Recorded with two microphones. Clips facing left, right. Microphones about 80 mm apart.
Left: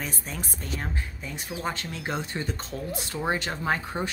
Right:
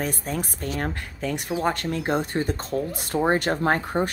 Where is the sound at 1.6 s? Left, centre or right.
Right.